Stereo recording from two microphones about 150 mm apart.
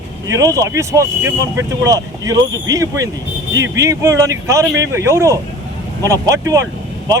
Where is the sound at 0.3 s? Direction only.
20° right (ahead or behind).